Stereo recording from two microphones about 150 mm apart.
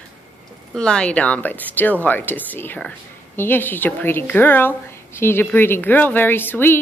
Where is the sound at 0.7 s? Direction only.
5° left (ahead or behind).